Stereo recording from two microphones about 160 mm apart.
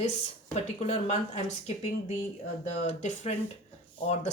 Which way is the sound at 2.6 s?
45° left (ahead or behind).